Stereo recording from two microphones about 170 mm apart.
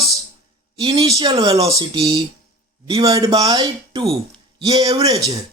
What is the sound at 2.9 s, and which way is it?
Speech, 20° right (ahead or behind).